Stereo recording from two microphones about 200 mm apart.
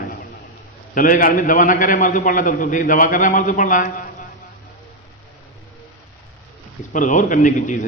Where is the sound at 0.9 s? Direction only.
45° left (ahead or behind).